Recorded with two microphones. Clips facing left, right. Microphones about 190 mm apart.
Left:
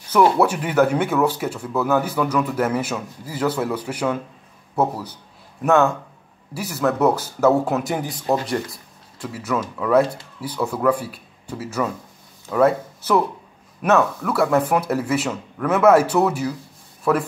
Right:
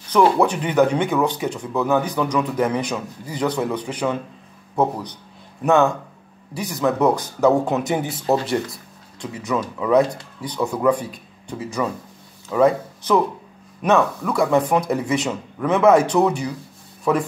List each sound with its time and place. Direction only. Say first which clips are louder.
0.1 s a man's voice: even; 5° left (ahead or behind)
9.9 s a man's voice: even; 5° left (ahead or behind)
10.8 s speech: right 1 dB; 15° right (ahead or behind)
11.6 s a man's voice: even; 5° left (ahead or behind)
13.8 s a man's voice: even; 5° left (ahead or behind)